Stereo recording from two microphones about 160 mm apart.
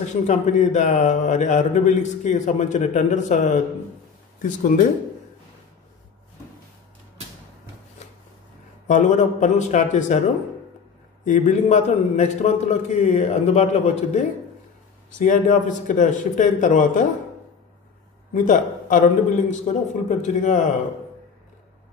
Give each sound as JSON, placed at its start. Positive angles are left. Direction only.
{"t": 0.0, "sound": "speech", "side_deg": 50}
{"t": 8.8, "sound": "speech", "side_deg": 50}
{"t": 11.2, "sound": "speech", "side_deg": 50}
{"t": 18.3, "sound": "speech", "side_deg": 55}